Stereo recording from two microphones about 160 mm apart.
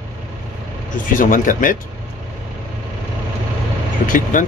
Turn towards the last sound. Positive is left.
turn(degrees=55)  # may be behind; listen again after turning